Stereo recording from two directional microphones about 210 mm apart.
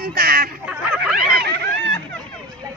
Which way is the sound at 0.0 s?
45° right (ahead or behind).